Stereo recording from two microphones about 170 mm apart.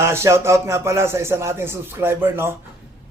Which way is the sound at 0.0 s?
15° right (ahead or behind).